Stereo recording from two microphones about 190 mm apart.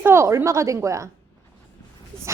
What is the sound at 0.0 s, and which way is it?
A woman's voice, 15° right (ahead or behind).